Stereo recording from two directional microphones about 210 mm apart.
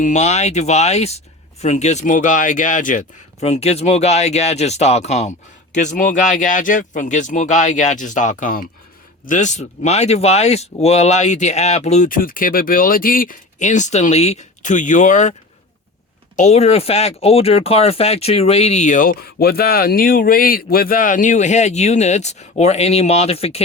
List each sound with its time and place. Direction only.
0.0 s speech: 35° left (ahead or behind)